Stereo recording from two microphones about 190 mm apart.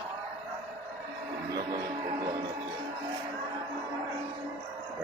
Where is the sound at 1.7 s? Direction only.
25° right (ahead or behind).